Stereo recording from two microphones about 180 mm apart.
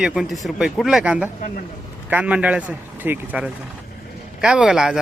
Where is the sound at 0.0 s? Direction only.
5° right (ahead or behind).